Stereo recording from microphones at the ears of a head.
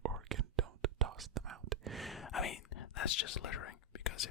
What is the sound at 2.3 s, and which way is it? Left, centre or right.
Whispering, left.